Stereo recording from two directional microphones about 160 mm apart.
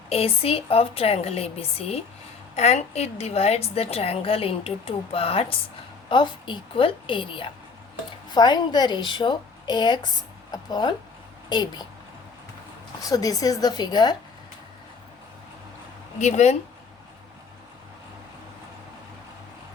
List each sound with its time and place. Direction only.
0.1 s a woman's voice: 35° left (ahead or behind)
13.0 s a woman's voice: 25° left (ahead or behind)
16.1 s speech: 45° left (ahead or behind)